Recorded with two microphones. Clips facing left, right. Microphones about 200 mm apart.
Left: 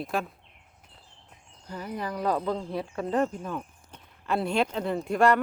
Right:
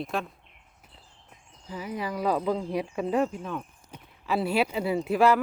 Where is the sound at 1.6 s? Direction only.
5° right (ahead or behind).